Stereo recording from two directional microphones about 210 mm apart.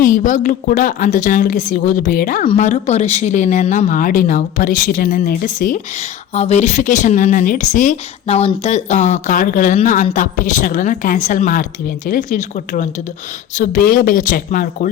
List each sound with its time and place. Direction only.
0.0 s speech: 40° left (ahead or behind)